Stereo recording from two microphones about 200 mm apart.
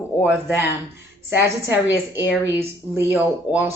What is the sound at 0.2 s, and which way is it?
Speech, 5° right (ahead or behind).